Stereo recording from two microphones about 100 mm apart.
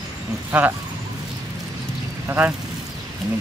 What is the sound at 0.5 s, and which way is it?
Speech, 15° right (ahead or behind).